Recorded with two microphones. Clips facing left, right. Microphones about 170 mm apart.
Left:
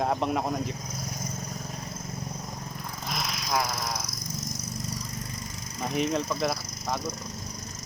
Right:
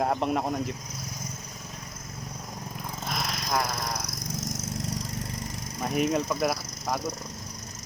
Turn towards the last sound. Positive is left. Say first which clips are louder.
# right 1 dB
turn(degrees=-10)  # may be behind; listen again after turning